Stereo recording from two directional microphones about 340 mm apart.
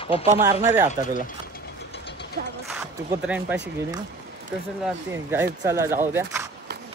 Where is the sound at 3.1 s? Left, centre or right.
Centre.